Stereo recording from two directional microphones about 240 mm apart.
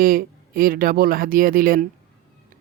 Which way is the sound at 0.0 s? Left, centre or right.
Right.